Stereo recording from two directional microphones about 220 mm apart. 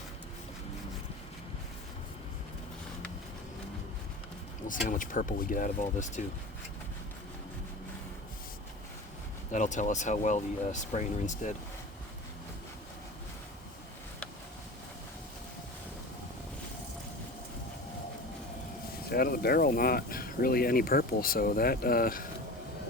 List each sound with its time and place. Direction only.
4.7 s speech: 35° left (ahead or behind)
9.5 s speech: 35° left (ahead or behind)
19.1 s speech: 45° left (ahead or behind)